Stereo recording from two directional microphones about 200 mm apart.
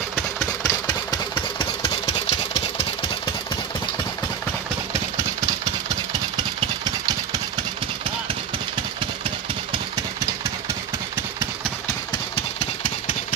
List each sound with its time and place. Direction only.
0.7 s engine: 20° left (ahead or behind)
6.3 s engine: 20° right (ahead or behind)